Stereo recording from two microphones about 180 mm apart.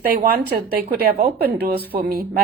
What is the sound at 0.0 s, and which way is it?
A woman's voice, 60° right (ahead or behind).